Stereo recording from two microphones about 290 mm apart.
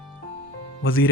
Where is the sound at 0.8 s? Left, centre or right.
Left.